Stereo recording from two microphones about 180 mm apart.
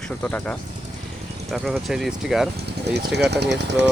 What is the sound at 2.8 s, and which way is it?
Speech, 65° right (ahead or behind).